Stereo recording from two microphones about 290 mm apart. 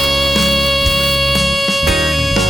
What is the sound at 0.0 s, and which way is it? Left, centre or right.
Music, centre.